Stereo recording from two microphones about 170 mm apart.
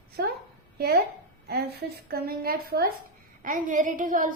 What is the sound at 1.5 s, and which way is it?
A woman's voice, 70° right (ahead or behind).